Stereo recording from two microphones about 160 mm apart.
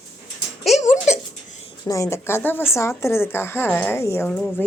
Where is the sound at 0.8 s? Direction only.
45° left (ahead or behind).